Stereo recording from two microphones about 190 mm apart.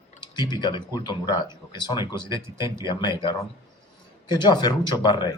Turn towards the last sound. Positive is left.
turn(degrees=20)  # may be behind; listen again after turning